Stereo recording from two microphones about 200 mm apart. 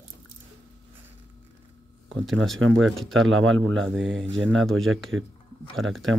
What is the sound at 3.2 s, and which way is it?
Speech, 80° right.